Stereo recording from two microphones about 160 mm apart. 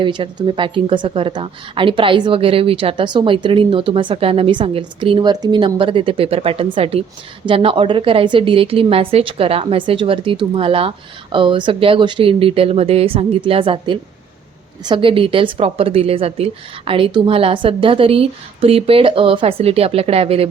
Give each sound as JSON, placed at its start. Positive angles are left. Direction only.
{"t": 0.0, "sound": "speech", "side_deg": -30}